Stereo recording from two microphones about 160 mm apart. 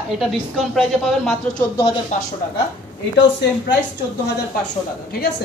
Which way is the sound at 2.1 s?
50° left (ahead or behind).